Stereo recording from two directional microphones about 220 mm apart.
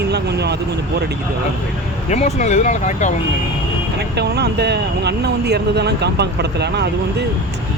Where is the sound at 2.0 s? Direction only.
30° left (ahead or behind).